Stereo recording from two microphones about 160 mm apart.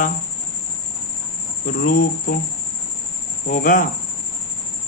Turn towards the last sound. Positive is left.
turn(degrees=55)  # may be behind; listen again after turning